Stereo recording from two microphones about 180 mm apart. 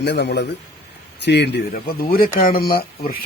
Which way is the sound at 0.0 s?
70° left (ahead or behind).